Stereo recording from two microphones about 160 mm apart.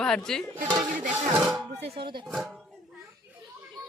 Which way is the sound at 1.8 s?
35° right (ahead or behind).